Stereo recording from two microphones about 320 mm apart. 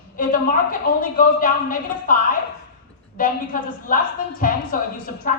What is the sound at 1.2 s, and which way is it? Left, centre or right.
Speech, left.